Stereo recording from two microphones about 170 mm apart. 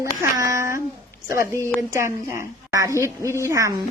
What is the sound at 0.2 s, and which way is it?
Speech, 20° right (ahead or behind).